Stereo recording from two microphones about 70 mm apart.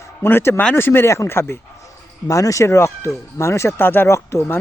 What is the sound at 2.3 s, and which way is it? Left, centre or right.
A man's voice, left.